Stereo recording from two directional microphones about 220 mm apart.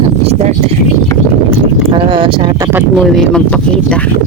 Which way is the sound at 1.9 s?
20° right (ahead or behind).